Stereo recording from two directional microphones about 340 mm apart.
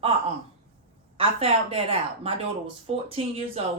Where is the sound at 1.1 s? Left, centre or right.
Centre.